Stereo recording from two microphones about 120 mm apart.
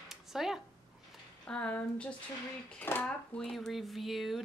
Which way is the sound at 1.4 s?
10° left (ahead or behind).